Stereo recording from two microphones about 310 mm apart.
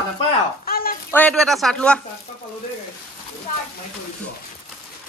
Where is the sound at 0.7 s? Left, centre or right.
Left.